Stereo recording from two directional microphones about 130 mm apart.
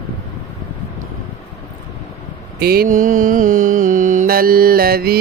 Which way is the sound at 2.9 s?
90° right.